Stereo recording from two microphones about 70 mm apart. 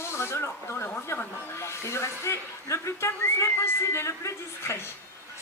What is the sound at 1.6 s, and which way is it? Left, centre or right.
Speech, left.